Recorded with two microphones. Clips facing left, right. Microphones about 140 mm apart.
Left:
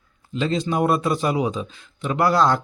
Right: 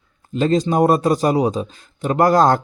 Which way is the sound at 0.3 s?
45° right (ahead or behind).